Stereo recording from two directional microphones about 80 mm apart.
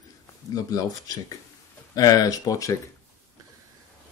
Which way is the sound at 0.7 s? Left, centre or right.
Left.